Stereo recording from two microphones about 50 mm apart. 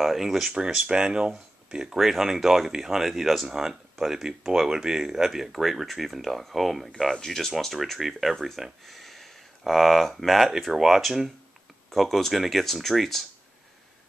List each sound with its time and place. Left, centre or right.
0.0 s speech: centre
0.7 s speech: centre
1.9 s speech: centre